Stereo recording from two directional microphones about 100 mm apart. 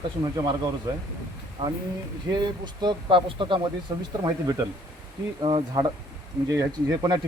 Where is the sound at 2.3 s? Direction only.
45° right (ahead or behind).